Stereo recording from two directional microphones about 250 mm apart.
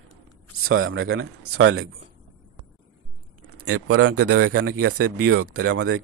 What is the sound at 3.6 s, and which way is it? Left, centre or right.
A man's voice, right.